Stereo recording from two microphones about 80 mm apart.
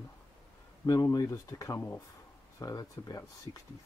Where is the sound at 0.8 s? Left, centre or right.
Left.